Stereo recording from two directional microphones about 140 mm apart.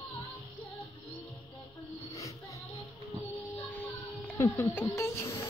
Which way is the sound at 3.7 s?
10° left (ahead or behind).